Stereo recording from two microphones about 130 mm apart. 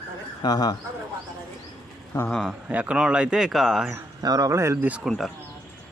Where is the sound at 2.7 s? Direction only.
10° right (ahead or behind).